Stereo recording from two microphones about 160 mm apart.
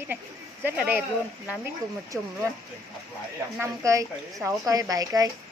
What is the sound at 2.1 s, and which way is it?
Speech, 5° right (ahead or behind).